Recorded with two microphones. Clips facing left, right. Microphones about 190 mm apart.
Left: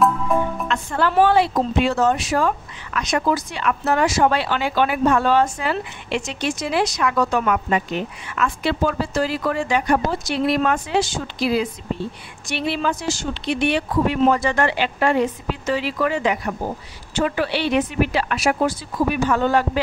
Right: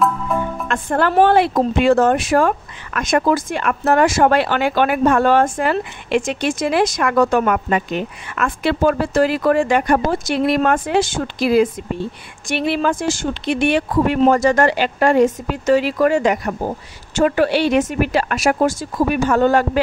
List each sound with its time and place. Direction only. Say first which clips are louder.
0.7 s a woman's voice: right 3 dB; 55° right (ahead or behind)